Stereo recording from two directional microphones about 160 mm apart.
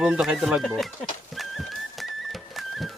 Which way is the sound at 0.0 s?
5° right (ahead or behind).